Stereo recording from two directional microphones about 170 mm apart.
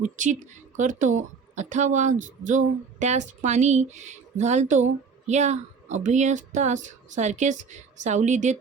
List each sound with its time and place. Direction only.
0.0 s speech: 45° right (ahead or behind)